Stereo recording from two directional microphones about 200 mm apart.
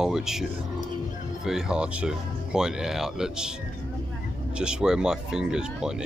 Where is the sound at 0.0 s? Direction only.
5° right (ahead or behind).